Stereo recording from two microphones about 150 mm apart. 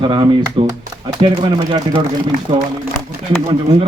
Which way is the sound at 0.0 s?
30° right (ahead or behind).